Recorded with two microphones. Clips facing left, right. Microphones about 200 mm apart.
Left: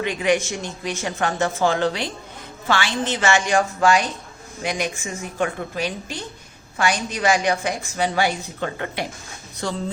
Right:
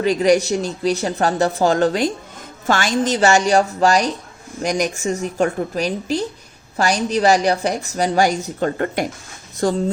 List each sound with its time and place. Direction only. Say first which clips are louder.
0.0 s a woman's voice: right 6 dB; 35° right (ahead or behind)